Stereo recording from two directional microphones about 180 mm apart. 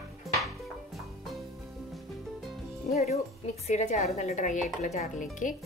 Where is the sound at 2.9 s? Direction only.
40° left (ahead or behind).